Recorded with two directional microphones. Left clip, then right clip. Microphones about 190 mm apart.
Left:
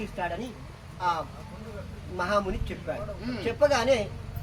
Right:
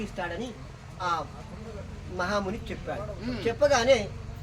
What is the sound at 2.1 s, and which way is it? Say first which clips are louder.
A woman's voice: left 2 dB; 10° right (ahead or behind).